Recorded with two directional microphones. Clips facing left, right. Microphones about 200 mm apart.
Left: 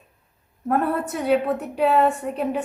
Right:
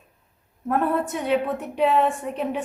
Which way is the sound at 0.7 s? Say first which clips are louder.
Even; centre (ahead or behind).